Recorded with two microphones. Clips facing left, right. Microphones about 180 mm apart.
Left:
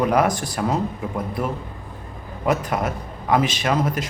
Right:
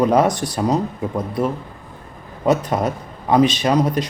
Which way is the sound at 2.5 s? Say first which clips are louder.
Right 4 dB; 20° right (ahead or behind).